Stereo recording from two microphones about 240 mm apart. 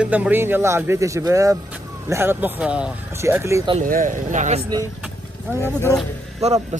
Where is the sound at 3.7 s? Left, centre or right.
Right.